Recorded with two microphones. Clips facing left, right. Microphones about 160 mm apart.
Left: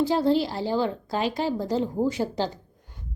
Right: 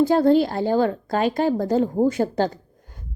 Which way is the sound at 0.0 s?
50° right (ahead or behind).